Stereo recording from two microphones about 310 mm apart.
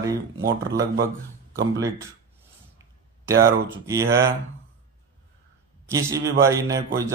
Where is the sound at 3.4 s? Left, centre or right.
Centre.